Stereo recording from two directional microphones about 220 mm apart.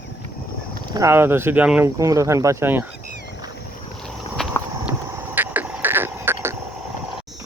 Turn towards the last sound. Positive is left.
turn(degrees=-10)  # may be behind; listen again after turning